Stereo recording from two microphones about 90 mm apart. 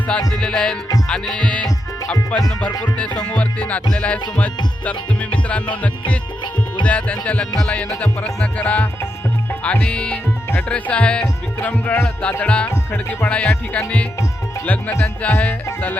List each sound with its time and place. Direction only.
0.1 s music: 5° left (ahead or behind)
2.8 s music: 15° left (ahead or behind)
6.8 s music: 15° left (ahead or behind)